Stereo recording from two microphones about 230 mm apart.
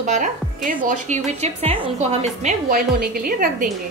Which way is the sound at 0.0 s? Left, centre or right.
Right.